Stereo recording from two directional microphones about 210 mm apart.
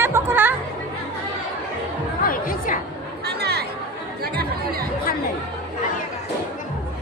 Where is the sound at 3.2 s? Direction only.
50° right (ahead or behind).